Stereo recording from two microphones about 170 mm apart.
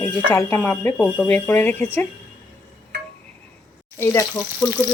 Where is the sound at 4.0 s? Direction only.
15° left (ahead or behind).